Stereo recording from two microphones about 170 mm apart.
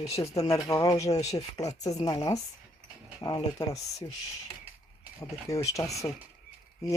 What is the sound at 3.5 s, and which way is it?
Speech, 20° left (ahead or behind).